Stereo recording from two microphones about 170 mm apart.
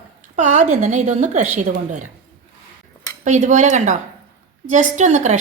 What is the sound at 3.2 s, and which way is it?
A woman's voice, 45° right (ahead or behind).